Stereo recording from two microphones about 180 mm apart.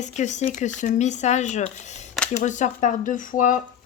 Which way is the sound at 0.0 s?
40° left (ahead or behind).